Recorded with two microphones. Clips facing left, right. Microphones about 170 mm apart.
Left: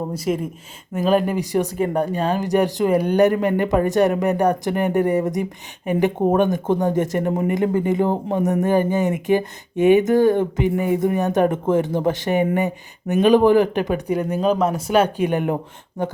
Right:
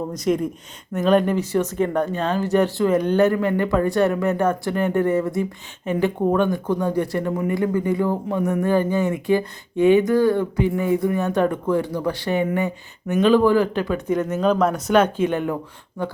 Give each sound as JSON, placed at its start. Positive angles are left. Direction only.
{"t": 0.1, "sound": "speech", "side_deg": 5}